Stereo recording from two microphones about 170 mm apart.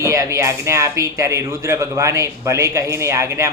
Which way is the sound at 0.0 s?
20° right (ahead or behind).